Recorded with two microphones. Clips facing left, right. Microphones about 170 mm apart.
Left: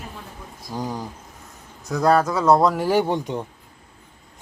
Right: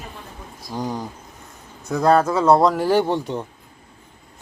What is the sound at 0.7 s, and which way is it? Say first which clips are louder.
Speech: right 2 dB; 10° left (ahead or behind).